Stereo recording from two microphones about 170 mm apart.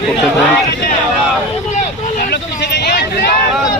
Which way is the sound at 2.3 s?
70° left (ahead or behind).